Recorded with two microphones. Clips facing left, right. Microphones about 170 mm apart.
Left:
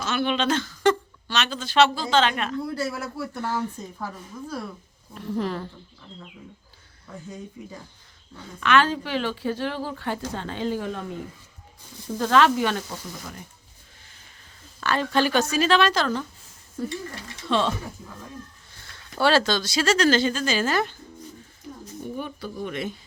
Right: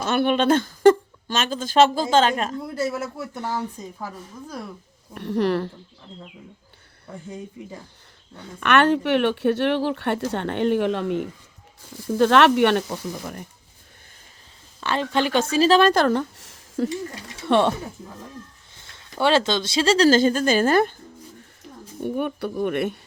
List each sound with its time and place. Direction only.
0.0 s speech: 55° right (ahead or behind)
2.5 s a woman's voice: 20° right (ahead or behind)
5.1 s speech: 70° right (ahead or behind)
8.4 s speech: 60° right (ahead or behind)
14.8 s a woman's voice: 20° right (ahead or behind)
15.8 s speech: 55° right (ahead or behind); by 16.9 s 90° right
17.4 s speech: 60° right (ahead or behind)
18.7 s speech: 20° right (ahead or behind); by 20.9 s 50° right (ahead or behind)
22.0 s speech: 65° right (ahead or behind)